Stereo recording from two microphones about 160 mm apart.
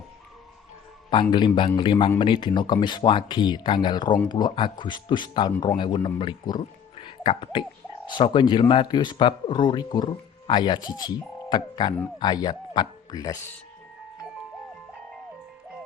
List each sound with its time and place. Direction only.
1.1 s speech: 30° left (ahead or behind)